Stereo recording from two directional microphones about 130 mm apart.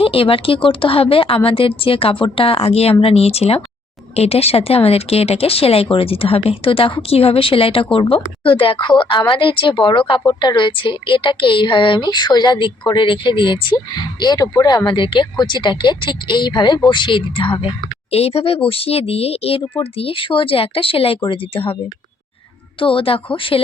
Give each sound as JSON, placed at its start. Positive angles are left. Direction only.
{"t": 0.0, "sound": "a woman's voice", "side_deg": 45}
{"t": 22.8, "sound": "speech", "side_deg": 45}